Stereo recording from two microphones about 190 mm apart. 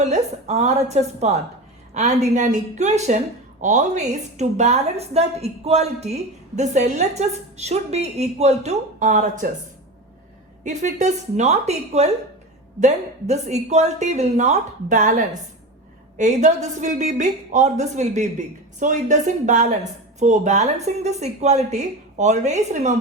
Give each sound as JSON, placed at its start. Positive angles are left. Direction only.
{"t": 0.0, "sound": "a woman's voice", "side_deg": -35}
{"t": 10.6, "sound": "a woman's voice", "side_deg": -40}